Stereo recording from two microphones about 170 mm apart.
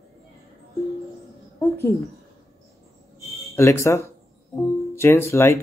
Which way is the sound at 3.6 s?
15° left (ahead or behind).